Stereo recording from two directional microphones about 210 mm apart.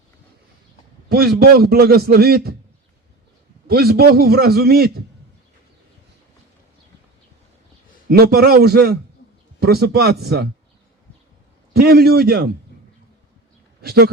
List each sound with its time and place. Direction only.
1.4 s a man's voice: 45° right (ahead or behind)
3.7 s a man's voice: 45° right (ahead or behind)
8.1 s a man's voice: 45° right (ahead or behind)
11.7 s a man's voice: 50° right (ahead or behind)
13.8 s a man's voice: 50° right (ahead or behind)